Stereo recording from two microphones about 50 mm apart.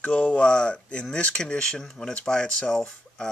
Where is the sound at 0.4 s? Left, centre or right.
Centre.